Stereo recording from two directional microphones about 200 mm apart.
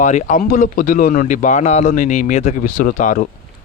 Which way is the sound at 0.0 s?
35° left (ahead or behind).